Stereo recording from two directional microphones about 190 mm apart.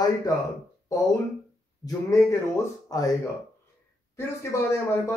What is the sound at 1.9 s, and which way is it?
Speech, 15° left (ahead or behind).